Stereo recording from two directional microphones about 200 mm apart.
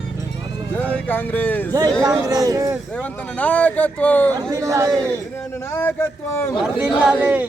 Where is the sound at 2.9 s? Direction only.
10° left (ahead or behind).